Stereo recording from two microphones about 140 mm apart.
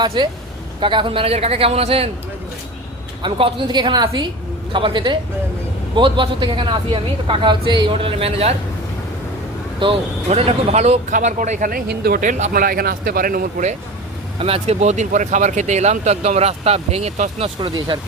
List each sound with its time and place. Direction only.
0.0 s speech: 35° right (ahead or behind)
3.2 s speech: 35° right (ahead or behind)
9.8 s speech: 45° right (ahead or behind)
11.1 s speech: 65° right (ahead or behind); by 13.7 s 90° right
14.3 s speech: 45° right (ahead or behind)
17.6 s speech: 35° right (ahead or behind)